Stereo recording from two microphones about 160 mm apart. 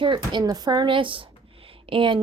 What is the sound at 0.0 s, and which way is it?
Speech, 30° right (ahead or behind).